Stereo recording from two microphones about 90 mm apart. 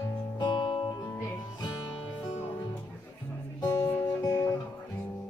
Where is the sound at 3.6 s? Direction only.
35° left (ahead or behind).